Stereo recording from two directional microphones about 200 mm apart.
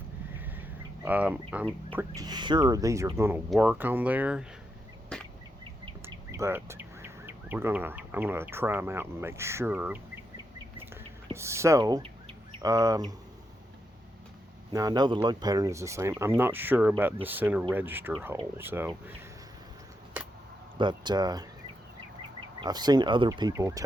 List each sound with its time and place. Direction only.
1.0 s speech: 10° right (ahead or behind)
5.1 s a sound: 5° left (ahead or behind)
6.3 s speech: 15° right (ahead or behind)
11.3 s speech: 15° right (ahead or behind)
14.7 s speech: 20° right (ahead or behind)
20.1 s a sound: 10° right (ahead or behind)
20.7 s speech: 20° right (ahead or behind)
22.6 s speech: 20° right (ahead or behind)